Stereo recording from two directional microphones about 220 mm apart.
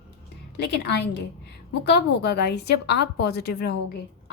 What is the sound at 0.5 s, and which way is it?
A woman's voice, 50° left (ahead or behind).